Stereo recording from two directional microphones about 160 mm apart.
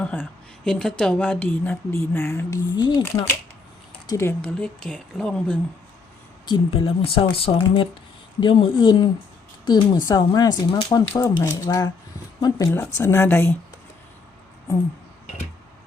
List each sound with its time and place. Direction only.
0.0 s a woman's voice: 5° left (ahead or behind)
6.7 s speech: 35° left (ahead or behind)
11.2 s a woman's voice: 15° left (ahead or behind)